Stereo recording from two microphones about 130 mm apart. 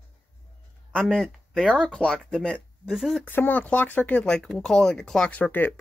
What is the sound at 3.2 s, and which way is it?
Speech, 15° left (ahead or behind).